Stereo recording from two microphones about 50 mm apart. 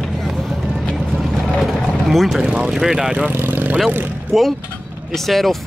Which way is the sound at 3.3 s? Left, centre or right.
Right.